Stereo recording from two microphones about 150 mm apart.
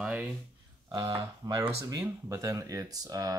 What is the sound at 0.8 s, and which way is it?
Speech, 30° right (ahead or behind).